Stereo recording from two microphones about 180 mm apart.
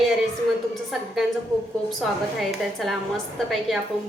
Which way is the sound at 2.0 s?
Centre (ahead or behind).